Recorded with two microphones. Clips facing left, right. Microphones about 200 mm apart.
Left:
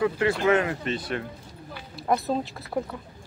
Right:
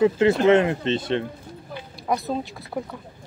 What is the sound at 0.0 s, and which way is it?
Speech, 25° right (ahead or behind).